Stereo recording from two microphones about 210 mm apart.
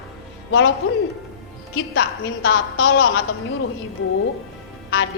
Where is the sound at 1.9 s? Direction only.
55° left (ahead or behind).